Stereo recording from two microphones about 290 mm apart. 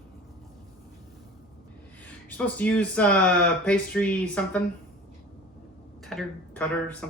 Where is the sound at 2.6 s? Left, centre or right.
Centre.